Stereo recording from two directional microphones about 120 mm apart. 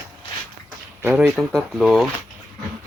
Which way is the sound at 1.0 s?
15° right (ahead or behind).